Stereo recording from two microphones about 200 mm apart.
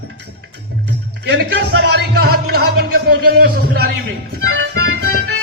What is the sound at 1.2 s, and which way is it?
Music, 55° right (ahead or behind).